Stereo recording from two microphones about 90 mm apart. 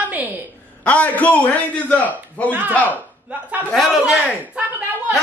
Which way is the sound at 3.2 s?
15° right (ahead or behind).